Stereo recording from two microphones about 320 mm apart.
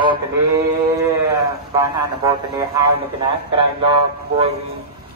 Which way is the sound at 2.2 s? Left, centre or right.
Centre.